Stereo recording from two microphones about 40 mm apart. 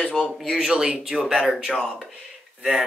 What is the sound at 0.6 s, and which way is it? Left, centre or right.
Speech, centre.